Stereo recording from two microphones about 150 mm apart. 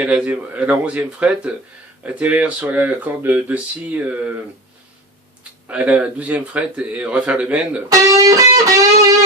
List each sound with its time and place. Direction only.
0.0 s speech: 5° right (ahead or behind)
5.6 s speech: 10° right (ahead or behind)
7.9 s music: 25° right (ahead or behind)